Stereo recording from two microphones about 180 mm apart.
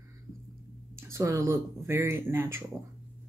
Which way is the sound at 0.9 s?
20° right (ahead or behind).